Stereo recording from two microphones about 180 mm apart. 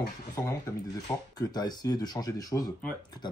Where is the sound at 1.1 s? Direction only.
10° left (ahead or behind).